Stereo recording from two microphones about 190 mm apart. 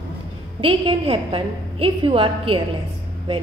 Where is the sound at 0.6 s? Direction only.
30° right (ahead or behind).